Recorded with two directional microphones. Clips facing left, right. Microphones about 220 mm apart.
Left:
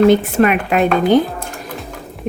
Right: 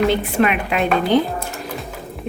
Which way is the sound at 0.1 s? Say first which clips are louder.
Left 5 dB; 45° left (ahead or behind).